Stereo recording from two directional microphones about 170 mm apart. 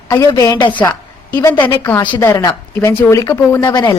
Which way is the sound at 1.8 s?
25° left (ahead or behind).